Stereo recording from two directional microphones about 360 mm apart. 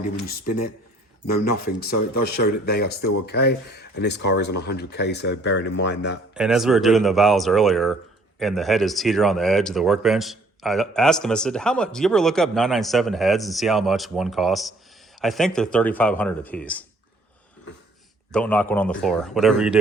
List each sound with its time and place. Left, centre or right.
1.5 s speech: left
6.3 s speech: centre
18.3 s speech: centre